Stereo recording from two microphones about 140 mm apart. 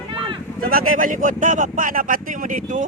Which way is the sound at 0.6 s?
90° right.